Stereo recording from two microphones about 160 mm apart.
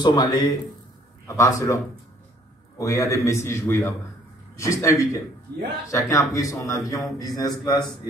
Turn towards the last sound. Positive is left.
turn(degrees=25)  # may be behind; listen again after turning